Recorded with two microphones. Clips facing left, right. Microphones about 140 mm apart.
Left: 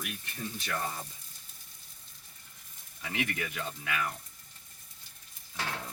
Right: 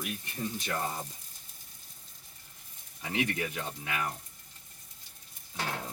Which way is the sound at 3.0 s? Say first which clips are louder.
Right 3 dB; 25° right (ahead or behind).